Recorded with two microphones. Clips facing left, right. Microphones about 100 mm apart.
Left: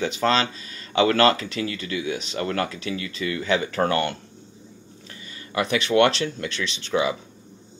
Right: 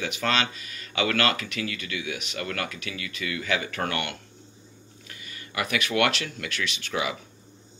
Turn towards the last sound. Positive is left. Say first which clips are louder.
# left 6 dB
turn(degrees=25)  # may be behind; listen again after turning